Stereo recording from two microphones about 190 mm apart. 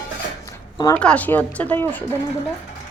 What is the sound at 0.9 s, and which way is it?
Speech, 5° left (ahead or behind).